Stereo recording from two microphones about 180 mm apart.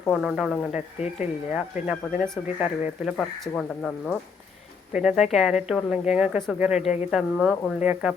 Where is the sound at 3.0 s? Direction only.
5° left (ahead or behind).